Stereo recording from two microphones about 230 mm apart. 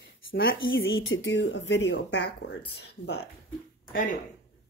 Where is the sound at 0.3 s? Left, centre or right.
Left.